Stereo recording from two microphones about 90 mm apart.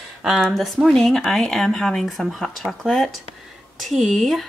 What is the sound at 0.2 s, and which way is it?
Speech, 5° right (ahead or behind).